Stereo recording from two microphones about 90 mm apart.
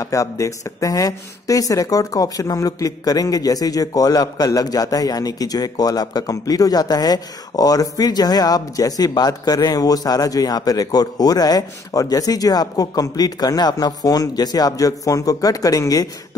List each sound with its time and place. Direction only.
0.0 s speech: 40° left (ahead or behind)